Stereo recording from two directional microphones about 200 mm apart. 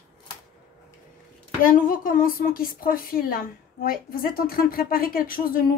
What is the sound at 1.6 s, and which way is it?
A woman's voice, 45° left (ahead or behind).